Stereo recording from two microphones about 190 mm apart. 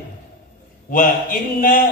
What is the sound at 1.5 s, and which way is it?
Speech, 45° left (ahead or behind).